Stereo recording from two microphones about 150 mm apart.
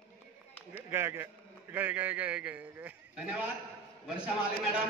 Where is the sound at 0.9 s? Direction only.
15° right (ahead or behind).